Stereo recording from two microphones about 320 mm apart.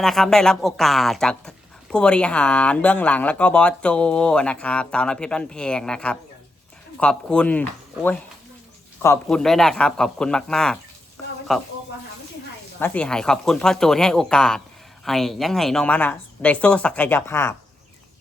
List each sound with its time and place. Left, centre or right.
0.0 s speech: centre
12.8 s speech: centre